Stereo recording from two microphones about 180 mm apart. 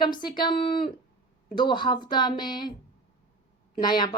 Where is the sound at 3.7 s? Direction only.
25° left (ahead or behind).